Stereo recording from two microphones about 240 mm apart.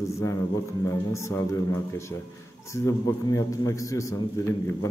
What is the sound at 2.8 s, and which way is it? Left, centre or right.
A man's voice, centre.